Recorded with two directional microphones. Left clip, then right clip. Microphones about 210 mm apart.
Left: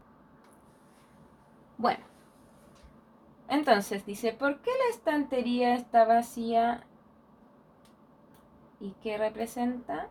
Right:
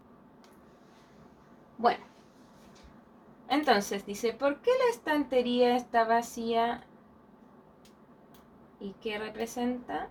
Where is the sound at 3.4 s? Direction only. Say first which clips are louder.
Left 1 dB; 40° left (ahead or behind).